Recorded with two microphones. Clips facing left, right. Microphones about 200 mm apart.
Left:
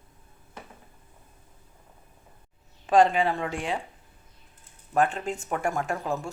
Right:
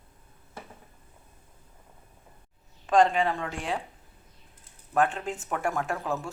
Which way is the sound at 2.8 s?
5° left (ahead or behind).